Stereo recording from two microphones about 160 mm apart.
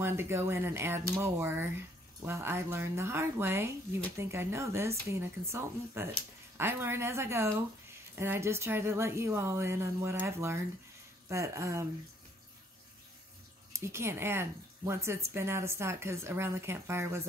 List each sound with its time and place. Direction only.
0.0 s speech: 15° right (ahead or behind)
13.7 s speech: 15° right (ahead or behind)